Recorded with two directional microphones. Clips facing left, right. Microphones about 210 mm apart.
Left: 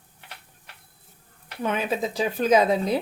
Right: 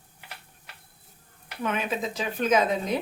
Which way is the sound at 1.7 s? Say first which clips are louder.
Left 4 dB; 35° left (ahead or behind).